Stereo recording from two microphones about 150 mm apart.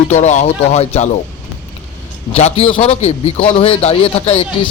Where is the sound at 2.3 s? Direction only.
45° left (ahead or behind).